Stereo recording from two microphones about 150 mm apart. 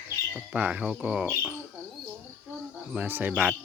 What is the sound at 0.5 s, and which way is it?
Speech, 10° right (ahead or behind).